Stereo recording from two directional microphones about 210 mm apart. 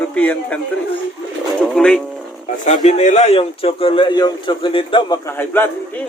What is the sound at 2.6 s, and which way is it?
A man's voice, 35° left (ahead or behind).